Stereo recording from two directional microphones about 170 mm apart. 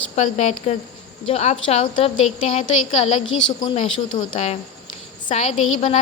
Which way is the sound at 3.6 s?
50° left (ahead or behind).